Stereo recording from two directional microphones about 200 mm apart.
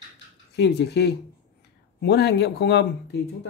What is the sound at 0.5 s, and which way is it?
Speech, 60° left (ahead or behind).